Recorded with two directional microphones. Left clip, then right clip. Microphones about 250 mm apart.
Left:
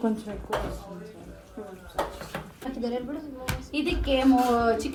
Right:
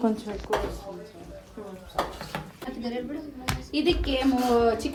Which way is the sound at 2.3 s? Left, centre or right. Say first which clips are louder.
Even; centre.